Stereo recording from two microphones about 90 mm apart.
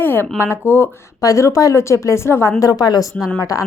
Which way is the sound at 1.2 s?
35° left (ahead or behind).